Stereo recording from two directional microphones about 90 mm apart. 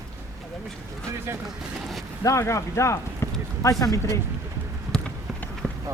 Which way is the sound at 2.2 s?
35° left (ahead or behind).